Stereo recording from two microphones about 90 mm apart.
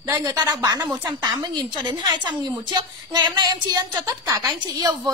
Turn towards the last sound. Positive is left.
turn(degrees=-45)  # may be behind; listen again after turning